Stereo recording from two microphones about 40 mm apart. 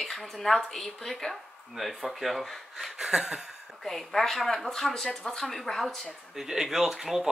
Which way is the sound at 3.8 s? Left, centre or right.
Centre.